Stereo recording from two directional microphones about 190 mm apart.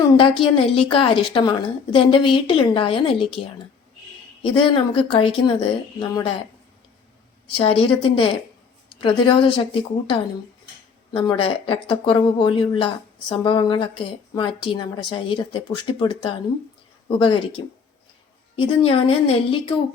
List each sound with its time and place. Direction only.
0.3 s speech: 30° left (ahead or behind)
4.4 s speech: 25° left (ahead or behind)
7.5 s speech: 30° left (ahead or behind)